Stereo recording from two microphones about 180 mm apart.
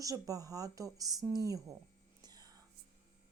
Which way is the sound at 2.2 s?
20° right (ahead or behind).